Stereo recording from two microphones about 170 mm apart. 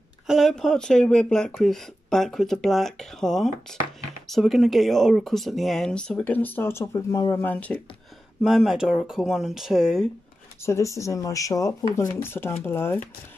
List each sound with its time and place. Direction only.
0.3 s speech: centre (ahead or behind)
8.4 s speech: centre (ahead or behind)
10.6 s speech: 15° left (ahead or behind)